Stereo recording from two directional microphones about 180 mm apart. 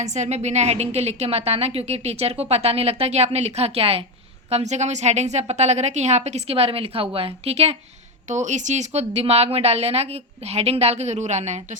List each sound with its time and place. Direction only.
0.0 s a woman's voice: 40° right (ahead or behind)